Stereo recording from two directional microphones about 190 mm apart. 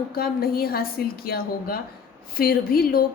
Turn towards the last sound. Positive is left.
turn(degrees=50)  # may be behind; listen again after turning